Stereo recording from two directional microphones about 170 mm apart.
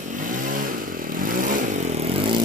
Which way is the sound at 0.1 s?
50° right (ahead or behind).